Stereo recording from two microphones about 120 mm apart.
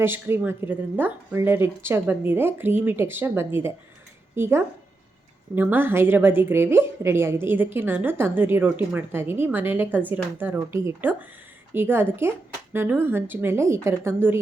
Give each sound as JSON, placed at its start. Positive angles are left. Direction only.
{"t": 0.0, "sound": "a woman's voice", "side_deg": -20}